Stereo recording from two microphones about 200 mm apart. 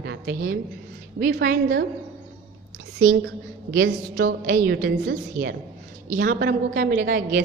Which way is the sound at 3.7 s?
65° right (ahead or behind).